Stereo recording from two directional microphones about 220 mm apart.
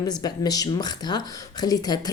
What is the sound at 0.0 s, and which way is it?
A woman's voice, 15° left (ahead or behind).